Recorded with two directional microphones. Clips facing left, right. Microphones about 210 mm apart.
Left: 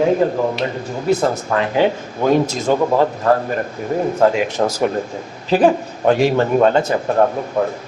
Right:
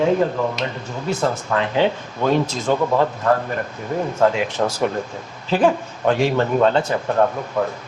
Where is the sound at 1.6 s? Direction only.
10° left (ahead or behind).